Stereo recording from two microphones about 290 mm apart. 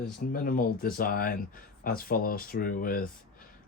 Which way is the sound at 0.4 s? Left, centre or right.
Left.